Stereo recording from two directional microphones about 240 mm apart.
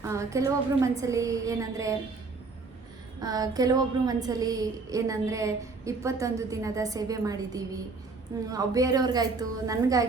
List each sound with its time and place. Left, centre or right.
0.0 s a woman's voice: centre
3.2 s a woman's voice: centre